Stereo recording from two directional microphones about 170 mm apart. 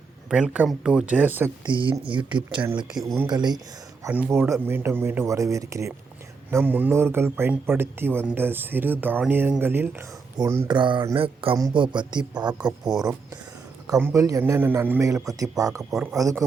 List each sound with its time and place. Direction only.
0.3 s speech: 5° right (ahead or behind)
1.6 s a man's voice: 30° right (ahead or behind)
2.9 s speech: centre (ahead or behind)
3.2 s a man's voice: 25° right (ahead or behind)
4.0 s speech: 10° right (ahead or behind)
10.7 s a man's voice: 30° right (ahead or behind)
12.5 s speech: 5° right (ahead or behind)
13.8 s a man's voice: 20° right (ahead or behind)
15.8 s speech: centre (ahead or behind)
16.1 s a man's voice: 20° right (ahead or behind)